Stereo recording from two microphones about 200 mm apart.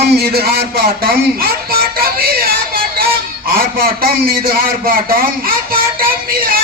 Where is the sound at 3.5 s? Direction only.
45° right (ahead or behind).